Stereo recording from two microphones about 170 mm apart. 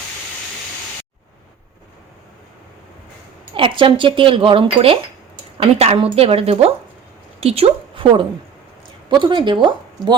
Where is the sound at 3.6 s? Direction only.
30° right (ahead or behind).